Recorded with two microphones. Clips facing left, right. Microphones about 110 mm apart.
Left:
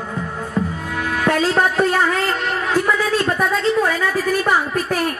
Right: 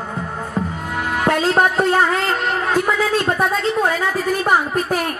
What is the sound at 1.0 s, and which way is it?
A man's voice, 25° right (ahead or behind).